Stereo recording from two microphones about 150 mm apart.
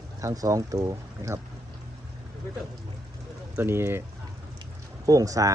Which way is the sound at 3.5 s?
15° right (ahead or behind).